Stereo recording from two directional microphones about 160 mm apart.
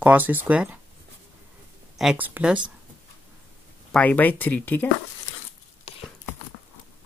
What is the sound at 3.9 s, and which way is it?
Speech, 10° left (ahead or behind).